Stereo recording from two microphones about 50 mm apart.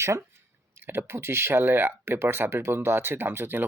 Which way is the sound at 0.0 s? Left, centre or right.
Right.